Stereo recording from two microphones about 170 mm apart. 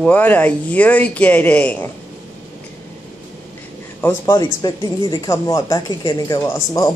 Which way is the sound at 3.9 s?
15° left (ahead or behind).